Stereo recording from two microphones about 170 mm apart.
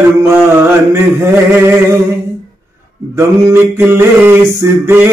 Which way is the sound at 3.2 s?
15° right (ahead or behind).